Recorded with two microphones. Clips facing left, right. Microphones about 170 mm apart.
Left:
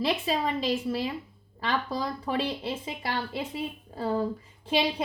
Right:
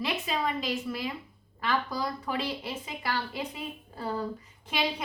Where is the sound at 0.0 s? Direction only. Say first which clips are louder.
Left 3 dB; 30° left (ahead or behind).